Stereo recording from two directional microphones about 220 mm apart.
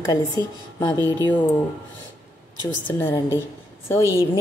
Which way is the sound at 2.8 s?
10° left (ahead or behind).